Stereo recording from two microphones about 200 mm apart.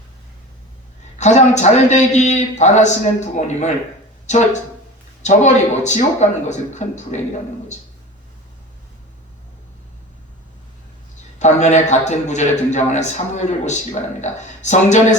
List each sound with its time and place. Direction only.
1.2 s a man's voice: 35° left (ahead or behind)
11.3 s a man's voice: 35° left (ahead or behind)